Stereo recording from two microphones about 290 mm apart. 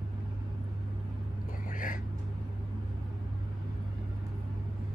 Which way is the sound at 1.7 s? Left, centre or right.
Left.